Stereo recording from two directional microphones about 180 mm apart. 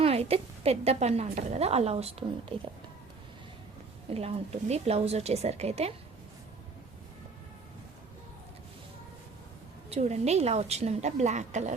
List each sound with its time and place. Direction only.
0.0 s a woman's voice: 35° right (ahead or behind)
4.1 s a woman's voice: 35° right (ahead or behind)
9.9 s a woman's voice: 35° right (ahead or behind)